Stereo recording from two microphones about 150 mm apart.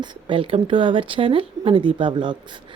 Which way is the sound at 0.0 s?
35° right (ahead or behind).